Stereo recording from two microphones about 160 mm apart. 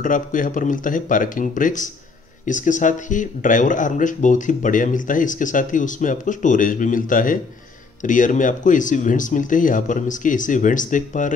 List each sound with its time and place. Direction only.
0.0 s speech: 55° left (ahead or behind)